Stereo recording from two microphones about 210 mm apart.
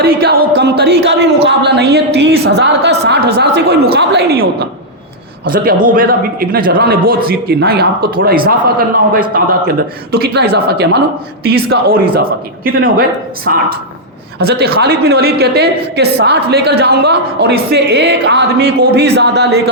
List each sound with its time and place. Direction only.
0.0 s a sound: 50° right (ahead or behind)
1.5 s a woman's voice: 50° right (ahead or behind)
10.1 s a woman's voice: 50° right (ahead or behind)